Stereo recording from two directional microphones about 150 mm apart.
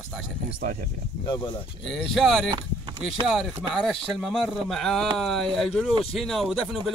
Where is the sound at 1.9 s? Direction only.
Centre (ahead or behind).